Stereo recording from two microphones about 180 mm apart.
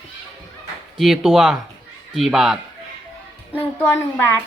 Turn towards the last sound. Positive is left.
turn(degrees=10)  # may be behind; listen again after turning